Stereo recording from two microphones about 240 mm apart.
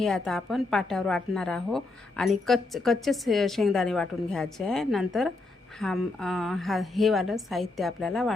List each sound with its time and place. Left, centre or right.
0.0 s a woman's voice: centre